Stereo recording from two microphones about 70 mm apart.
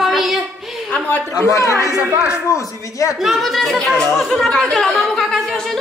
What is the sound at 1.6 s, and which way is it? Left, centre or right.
Speech, left.